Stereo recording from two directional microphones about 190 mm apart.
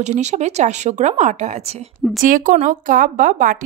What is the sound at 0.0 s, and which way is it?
A woman's voice, 35° right (ahead or behind).